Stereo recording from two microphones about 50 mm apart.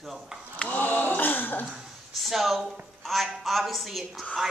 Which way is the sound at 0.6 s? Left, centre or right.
Left.